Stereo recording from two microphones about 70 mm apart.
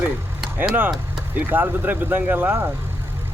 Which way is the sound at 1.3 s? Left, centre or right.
Right.